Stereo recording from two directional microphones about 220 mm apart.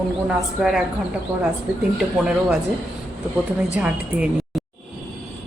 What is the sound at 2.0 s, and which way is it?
Speech, centre (ahead or behind).